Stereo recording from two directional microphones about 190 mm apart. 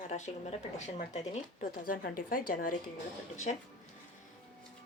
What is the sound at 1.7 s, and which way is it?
Speech, 50° left (ahead or behind).